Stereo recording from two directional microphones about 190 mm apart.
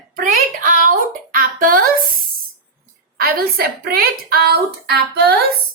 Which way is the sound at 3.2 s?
50° right (ahead or behind).